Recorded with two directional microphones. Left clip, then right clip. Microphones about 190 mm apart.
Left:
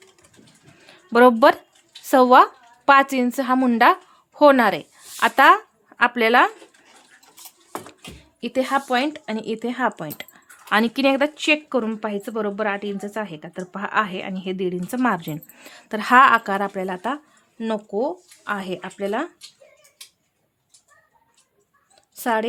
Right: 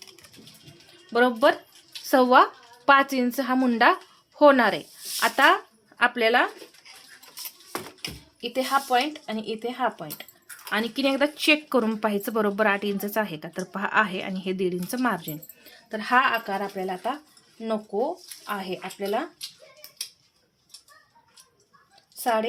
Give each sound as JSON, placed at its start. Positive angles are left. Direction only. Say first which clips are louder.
{"t": 1.1, "sound": "speech", "louder": "left 7 dB", "side_deg": 30}
{"t": 2.0, "sound": "speech", "louder": "left 5 dB", "side_deg": 20}
{"t": 8.4, "sound": "speech", "louder": "left 3 dB", "side_deg": 45}
{"t": 10.7, "sound": "speech", "louder": "left 6 dB", "side_deg": 30}
{"t": 15.6, "sound": "speech", "louder": "left 6 dB", "side_deg": 40}
{"t": 22.2, "sound": "speech", "louder": "left 2 dB", "side_deg": 50}